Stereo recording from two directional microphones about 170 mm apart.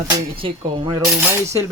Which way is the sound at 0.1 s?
30° right (ahead or behind).